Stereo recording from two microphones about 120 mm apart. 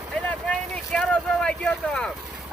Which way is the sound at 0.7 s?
5° left (ahead or behind).